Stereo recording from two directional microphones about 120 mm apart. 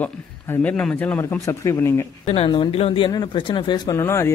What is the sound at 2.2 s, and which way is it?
Speech, 55° left (ahead or behind).